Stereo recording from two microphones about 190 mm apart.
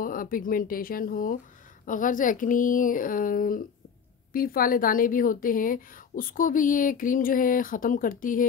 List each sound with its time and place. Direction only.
0.0 s a woman's voice: 45° left (ahead or behind)